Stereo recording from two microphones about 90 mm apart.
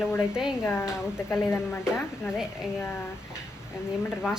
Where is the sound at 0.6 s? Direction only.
25° left (ahead or behind).